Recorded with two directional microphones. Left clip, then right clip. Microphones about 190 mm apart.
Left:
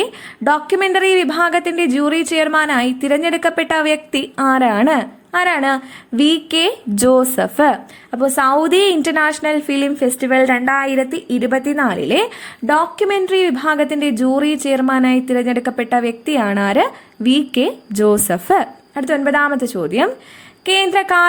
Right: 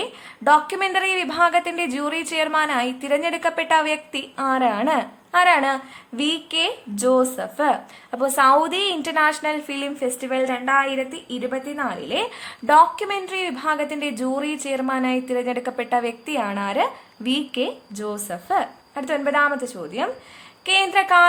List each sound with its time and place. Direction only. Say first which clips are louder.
0.4 s a woman's voice: left 3 dB; 20° left (ahead or behind)
8.1 s a woman's voice: left 2 dB; 15° left (ahead or behind)
12.6 s a woman's voice: even; 15° left (ahead or behind); by 20.1 s 35° left (ahead or behind)
20.7 s a woman's voice: left 3 dB; 20° left (ahead or behind)